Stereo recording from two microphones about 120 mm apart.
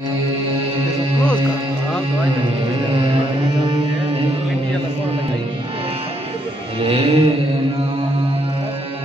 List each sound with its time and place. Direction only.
6.8 s music: 55° right (ahead or behind)